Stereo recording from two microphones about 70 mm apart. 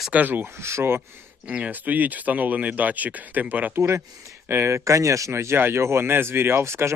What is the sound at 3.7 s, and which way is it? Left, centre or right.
Speech, right.